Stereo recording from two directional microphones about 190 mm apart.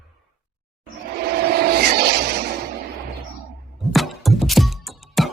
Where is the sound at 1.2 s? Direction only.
55° right (ahead or behind).